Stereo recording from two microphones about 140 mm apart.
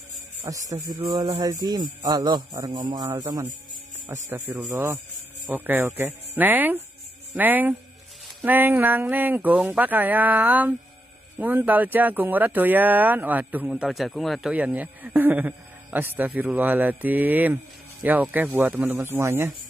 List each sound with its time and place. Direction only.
0.5 s speech: 25° right (ahead or behind)
1.0 s speech: 35° right (ahead or behind); by 14.5 s centre (ahead or behind)
14.5 s speech: 10° right (ahead or behind)